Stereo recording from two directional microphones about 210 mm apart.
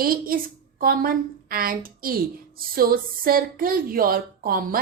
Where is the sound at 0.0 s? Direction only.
45° right (ahead or behind).